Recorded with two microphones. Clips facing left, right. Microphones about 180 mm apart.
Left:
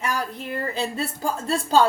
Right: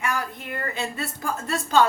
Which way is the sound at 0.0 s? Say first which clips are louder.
Left 1 dB; 30° left (ahead or behind).